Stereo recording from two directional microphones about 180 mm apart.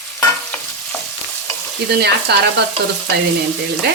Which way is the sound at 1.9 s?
65° right (ahead or behind).